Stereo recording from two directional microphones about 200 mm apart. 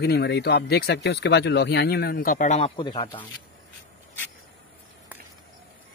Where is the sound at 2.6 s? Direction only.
25° left (ahead or behind).